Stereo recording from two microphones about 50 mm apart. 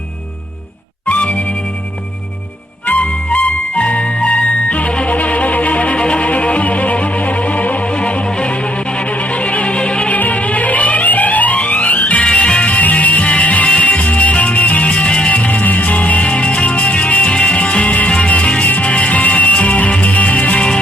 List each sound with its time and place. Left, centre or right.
1.0 s music: left
2.8 s music: left